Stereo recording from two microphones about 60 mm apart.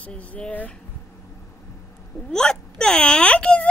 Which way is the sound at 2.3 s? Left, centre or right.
Centre.